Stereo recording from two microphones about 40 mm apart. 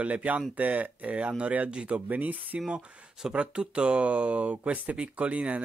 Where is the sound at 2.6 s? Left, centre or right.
Right.